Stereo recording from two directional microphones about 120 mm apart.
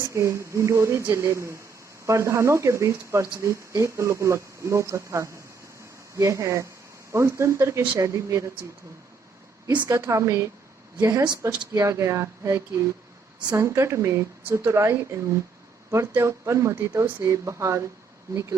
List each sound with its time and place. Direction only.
0.1 s speech: 25° right (ahead or behind)
9.9 s speech: 25° right (ahead or behind)